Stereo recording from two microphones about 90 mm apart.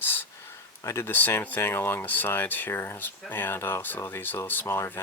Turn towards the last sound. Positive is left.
turn(degrees=25)  # may be behind; listen again after turning